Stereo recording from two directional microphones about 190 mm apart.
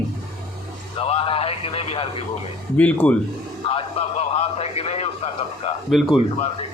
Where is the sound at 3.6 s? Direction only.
30° left (ahead or behind).